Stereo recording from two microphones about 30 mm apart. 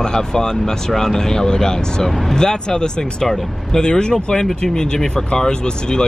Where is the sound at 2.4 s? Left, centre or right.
Left.